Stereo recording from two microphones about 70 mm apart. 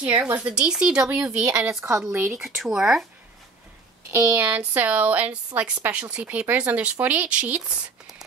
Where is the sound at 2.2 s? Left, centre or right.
Centre.